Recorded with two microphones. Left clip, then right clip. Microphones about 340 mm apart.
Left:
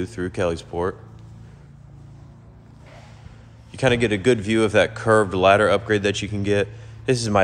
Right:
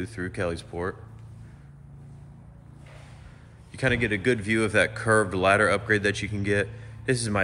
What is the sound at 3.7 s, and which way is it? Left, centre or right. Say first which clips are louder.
Speech: left 6 dB; centre.